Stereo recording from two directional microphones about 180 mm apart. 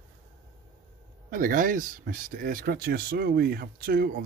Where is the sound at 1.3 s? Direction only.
50° right (ahead or behind).